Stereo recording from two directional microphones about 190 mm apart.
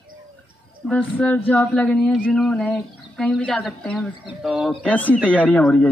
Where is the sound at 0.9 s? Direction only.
10° left (ahead or behind).